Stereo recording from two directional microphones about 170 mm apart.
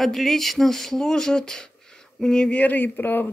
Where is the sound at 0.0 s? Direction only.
Centre (ahead or behind).